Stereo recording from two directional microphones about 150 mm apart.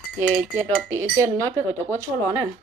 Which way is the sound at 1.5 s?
20° right (ahead or behind).